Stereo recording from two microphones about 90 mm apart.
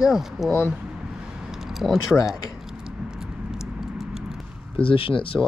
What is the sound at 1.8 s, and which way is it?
Speech, centre (ahead or behind).